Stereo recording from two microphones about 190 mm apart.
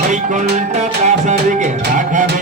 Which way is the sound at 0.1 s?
40° right (ahead or behind).